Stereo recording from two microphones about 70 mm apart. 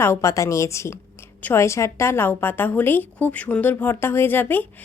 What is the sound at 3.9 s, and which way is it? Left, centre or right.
Speech, left.